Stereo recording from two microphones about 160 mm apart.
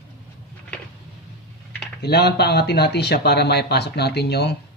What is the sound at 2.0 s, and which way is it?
A man's voice, 90° left.